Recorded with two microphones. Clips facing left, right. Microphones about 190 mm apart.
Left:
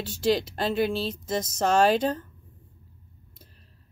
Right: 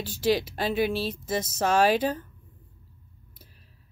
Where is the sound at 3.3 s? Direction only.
5° right (ahead or behind).